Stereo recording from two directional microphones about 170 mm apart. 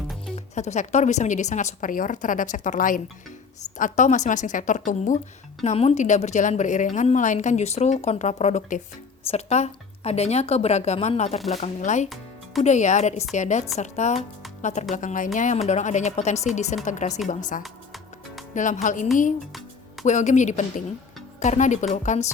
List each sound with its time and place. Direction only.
0.3 s a woman's voice: 40° left (ahead or behind)
12.0 s music: centre (ahead or behind)
12.6 s a woman's voice: 45° left (ahead or behind)
17.6 s music: centre (ahead or behind)
18.5 s a woman's voice: 45° left (ahead or behind)
20.1 s a woman's voice: 45° left (ahead or behind)